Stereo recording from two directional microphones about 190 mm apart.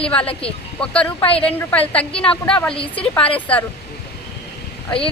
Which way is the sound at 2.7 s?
30° left (ahead or behind).